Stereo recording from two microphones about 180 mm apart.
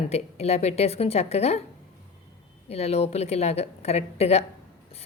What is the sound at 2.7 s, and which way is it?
A woman's voice, 35° left (ahead or behind).